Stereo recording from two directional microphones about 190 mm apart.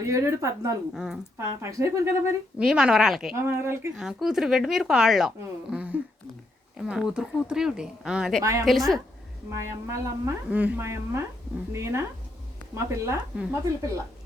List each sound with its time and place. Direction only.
0.0 s a woman's voice: 15° right (ahead or behind)
0.9 s speech: centre (ahead or behind)
1.4 s a woman's voice: 15° right (ahead or behind)
2.6 s speech: 5° right (ahead or behind)
3.3 s a woman's voice: 15° right (ahead or behind)
3.9 s speech: 5° right (ahead or behind)
5.7 s a sound: 5° right (ahead or behind)
6.7 s speech: 5° right (ahead or behind)
8.4 s a woman's voice: 15° right (ahead or behind)
8.6 s speech: centre (ahead or behind)
9.5 s a woman's voice: 15° right (ahead or behind)